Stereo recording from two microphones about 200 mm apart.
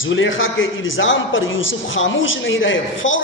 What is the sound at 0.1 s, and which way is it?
A man's voice, 75° left (ahead or behind).